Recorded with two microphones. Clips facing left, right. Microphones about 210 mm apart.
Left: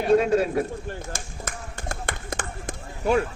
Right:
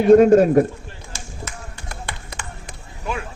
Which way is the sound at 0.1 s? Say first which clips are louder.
Right 9 dB; 50° right (ahead or behind).